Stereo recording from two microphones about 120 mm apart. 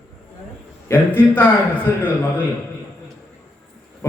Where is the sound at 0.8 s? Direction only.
15° left (ahead or behind).